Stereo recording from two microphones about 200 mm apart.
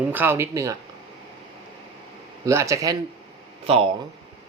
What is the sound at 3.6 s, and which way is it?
Speech, 30° right (ahead or behind).